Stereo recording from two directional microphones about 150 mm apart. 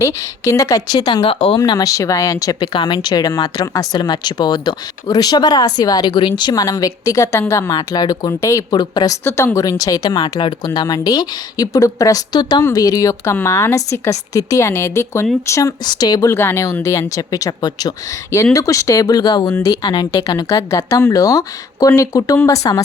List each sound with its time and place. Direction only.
0.0 s speech: 20° left (ahead or behind); by 1.5 s 40° left (ahead or behind)
1.5 s speech: 25° left (ahead or behind)
16.3 s speech: 15° left (ahead or behind)